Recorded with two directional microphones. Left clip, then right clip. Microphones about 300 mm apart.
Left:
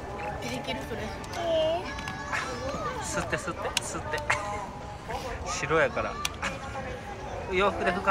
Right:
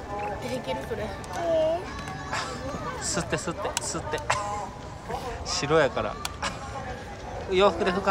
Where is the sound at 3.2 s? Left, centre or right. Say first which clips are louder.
Right 2 dB; centre.